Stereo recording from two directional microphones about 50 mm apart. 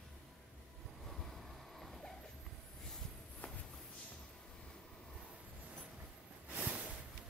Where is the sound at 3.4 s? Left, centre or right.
Left.